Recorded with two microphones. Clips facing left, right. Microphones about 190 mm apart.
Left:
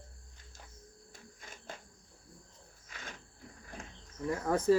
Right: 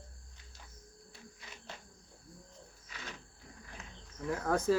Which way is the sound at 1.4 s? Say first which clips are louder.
Left 3 dB; 50° left (ahead or behind).